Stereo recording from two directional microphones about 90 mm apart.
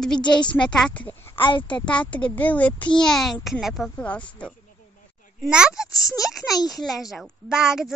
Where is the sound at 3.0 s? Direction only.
5° left (ahead or behind).